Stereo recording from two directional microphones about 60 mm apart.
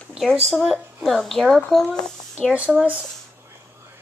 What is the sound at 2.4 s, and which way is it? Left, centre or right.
Speech, centre.